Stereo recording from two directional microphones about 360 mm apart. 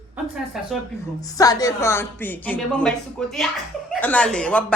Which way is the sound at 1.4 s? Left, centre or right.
Centre.